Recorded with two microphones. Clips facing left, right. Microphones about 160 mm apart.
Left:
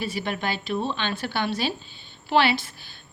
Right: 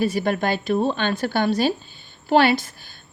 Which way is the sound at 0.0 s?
45° right (ahead or behind).